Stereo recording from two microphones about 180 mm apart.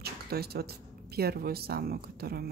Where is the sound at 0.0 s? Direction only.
60° right (ahead or behind).